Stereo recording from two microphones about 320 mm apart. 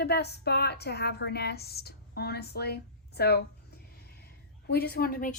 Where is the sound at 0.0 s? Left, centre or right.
Left.